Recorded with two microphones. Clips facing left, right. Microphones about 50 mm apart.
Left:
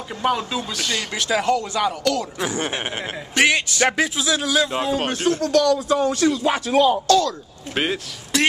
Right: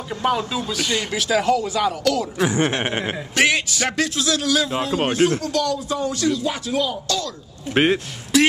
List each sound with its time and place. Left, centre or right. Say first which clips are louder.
0.1 s speech: right 1 dB; centre
2.8 s speech: right 4 dB; centre
3.3 s speech: left 1 dB; centre
3.9 s speech: even; centre
4.9 s speech: right 6 dB; right
5.4 s speech: left 5 dB; left
7.7 s speech: right 5 dB; right